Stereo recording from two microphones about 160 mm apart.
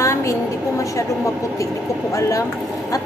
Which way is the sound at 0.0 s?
20° left (ahead or behind).